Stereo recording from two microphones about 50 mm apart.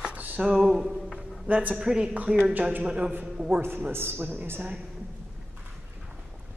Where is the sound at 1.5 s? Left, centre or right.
Right.